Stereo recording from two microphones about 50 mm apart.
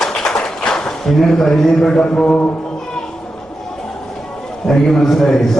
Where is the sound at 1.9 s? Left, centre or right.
Centre.